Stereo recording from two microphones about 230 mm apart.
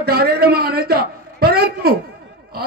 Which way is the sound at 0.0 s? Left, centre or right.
Right.